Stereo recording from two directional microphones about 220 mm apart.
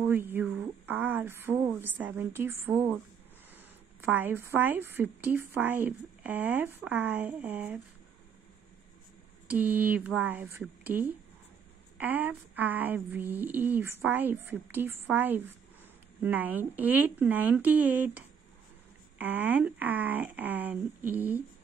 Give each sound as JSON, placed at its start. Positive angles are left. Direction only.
{"t": 0.0, "sound": "a woman's voice", "side_deg": -10}
{"t": 9.5, "sound": "a woman's voice", "side_deg": -10}
{"t": 19.1, "sound": "a woman's voice", "side_deg": -10}